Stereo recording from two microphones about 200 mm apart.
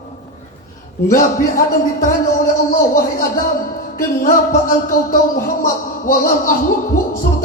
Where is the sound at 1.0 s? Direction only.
45° left (ahead or behind).